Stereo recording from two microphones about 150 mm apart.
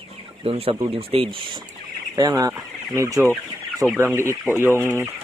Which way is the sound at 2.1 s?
25° right (ahead or behind).